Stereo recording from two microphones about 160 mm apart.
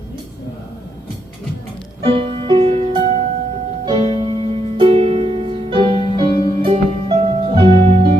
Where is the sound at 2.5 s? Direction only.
30° right (ahead or behind).